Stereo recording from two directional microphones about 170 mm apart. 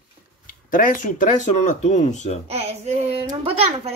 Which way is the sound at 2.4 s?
40° right (ahead or behind).